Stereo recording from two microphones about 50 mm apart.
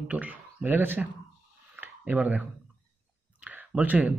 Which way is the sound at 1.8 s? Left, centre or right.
Right.